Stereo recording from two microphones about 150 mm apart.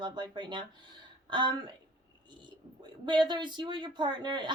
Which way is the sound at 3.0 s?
30° right (ahead or behind).